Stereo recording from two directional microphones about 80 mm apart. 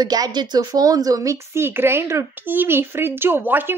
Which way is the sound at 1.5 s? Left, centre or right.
Right.